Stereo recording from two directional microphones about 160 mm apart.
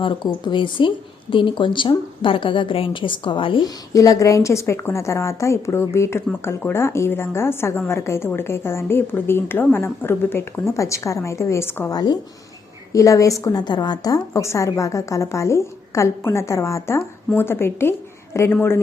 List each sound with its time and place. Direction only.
0.4 s speech: 30° left (ahead or behind)
3.9 s a woman's voice: 20° left (ahead or behind)
11.9 s a woman's voice: 25° left (ahead or behind)